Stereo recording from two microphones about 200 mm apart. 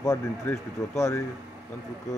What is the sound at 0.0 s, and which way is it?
Speech, 15° left (ahead or behind).